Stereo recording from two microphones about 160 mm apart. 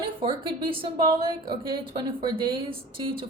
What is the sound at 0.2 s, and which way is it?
Speech, 30° right (ahead or behind).